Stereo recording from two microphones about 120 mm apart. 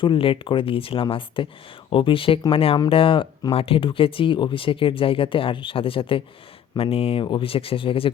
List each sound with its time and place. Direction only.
0.0 s speech: 45° left (ahead or behind)